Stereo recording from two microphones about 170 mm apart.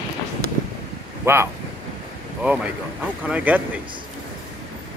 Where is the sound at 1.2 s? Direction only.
15° right (ahead or behind).